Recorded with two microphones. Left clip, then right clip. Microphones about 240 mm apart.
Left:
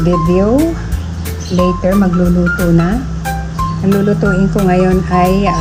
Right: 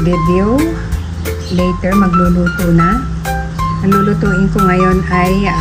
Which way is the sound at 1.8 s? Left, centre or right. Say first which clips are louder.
Even; centre.